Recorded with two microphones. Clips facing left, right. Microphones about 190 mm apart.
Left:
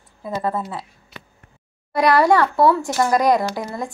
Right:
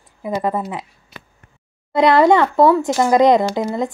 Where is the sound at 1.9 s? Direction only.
25° right (ahead or behind).